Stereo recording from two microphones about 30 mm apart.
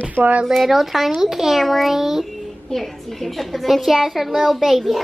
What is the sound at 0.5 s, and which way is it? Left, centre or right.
A child's voice, centre.